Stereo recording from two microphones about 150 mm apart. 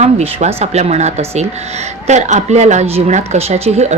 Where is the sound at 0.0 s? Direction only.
45° right (ahead or behind).